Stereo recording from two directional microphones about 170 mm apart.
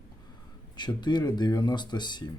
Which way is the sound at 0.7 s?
25° left (ahead or behind).